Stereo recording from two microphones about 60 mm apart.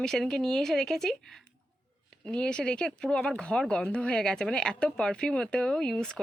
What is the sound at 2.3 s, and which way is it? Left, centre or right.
Speech, centre.